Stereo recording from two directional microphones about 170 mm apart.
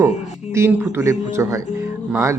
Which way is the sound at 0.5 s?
15° right (ahead or behind).